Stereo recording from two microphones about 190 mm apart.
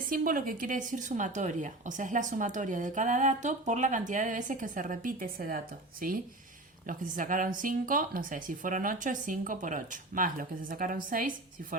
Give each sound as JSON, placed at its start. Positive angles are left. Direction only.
{"t": 0.1, "sound": "a woman's voice", "side_deg": -45}